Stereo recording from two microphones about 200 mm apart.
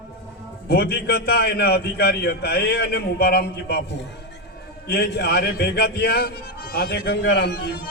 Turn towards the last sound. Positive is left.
turn(degrees=55)  # may be behind; listen again after turning